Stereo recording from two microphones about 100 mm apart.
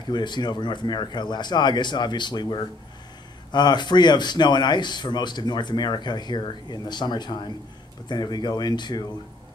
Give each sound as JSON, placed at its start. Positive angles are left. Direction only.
{"t": 0.0, "sound": "speech", "side_deg": 50}